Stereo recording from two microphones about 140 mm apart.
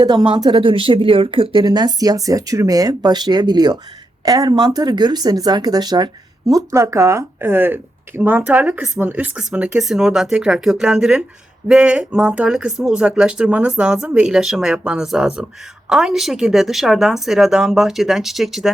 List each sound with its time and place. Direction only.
0.0 s a woman's voice: 30° right (ahead or behind); by 18.7 s centre (ahead or behind)